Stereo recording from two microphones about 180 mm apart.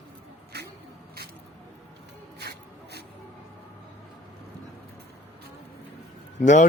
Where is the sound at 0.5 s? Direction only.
65° right (ahead or behind).